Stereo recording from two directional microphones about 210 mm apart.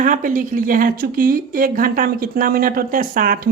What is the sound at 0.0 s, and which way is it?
Speech, 40° right (ahead or behind).